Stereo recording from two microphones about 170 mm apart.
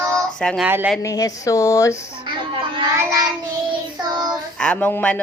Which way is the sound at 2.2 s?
30° right (ahead or behind).